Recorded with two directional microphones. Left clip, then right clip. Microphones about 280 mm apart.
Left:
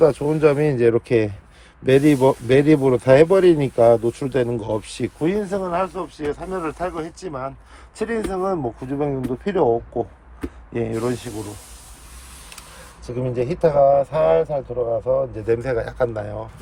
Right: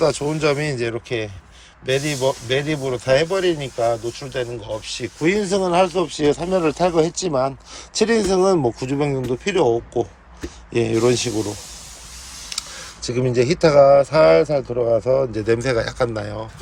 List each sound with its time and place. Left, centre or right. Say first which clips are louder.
0.0 s speech: left 3 dB; centre
5.2 s speech: right 4 dB; centre
13.0 s speech: right 5 dB; centre